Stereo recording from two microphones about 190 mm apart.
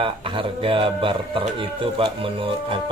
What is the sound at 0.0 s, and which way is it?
Speech, 30° right (ahead or behind).